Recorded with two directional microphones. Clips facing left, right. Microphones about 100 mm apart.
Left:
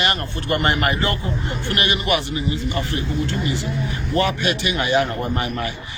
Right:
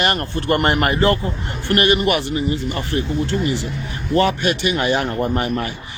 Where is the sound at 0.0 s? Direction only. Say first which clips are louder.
Right 3 dB; 45° right (ahead or behind).